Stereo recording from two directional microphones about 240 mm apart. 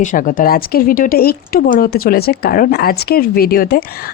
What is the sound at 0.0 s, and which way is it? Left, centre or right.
Speech, left.